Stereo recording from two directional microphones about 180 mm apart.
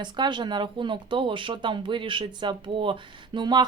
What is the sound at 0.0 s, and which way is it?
Speech, 25° right (ahead or behind).